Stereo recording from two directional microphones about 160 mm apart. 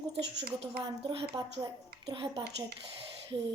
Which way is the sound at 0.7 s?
35° right (ahead or behind).